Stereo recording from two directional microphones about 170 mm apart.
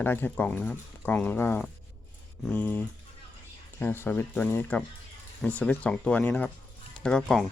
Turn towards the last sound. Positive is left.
turn(degrees=5)  # may be behind; listen again after turning